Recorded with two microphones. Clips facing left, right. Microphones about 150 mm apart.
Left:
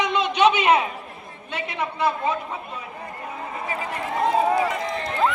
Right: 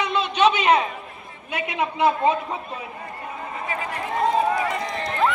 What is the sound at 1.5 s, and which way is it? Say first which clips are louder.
Speech: right 3 dB; 15° right (ahead or behind).